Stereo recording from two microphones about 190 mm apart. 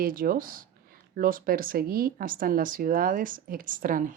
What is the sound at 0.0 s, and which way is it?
Speech, 50° right (ahead or behind).